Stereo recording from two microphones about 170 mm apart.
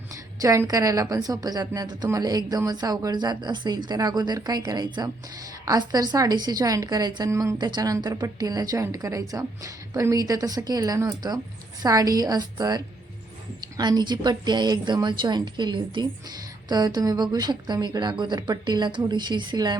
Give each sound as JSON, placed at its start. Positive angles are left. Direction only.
{"t": 0.4, "sound": "a woman's voice", "side_deg": -15}